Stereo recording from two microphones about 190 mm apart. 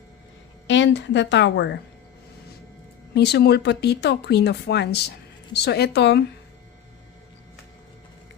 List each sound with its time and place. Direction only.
0.7 s a woman's voice: 70° left (ahead or behind)
3.2 s speech: 60° left (ahead or behind)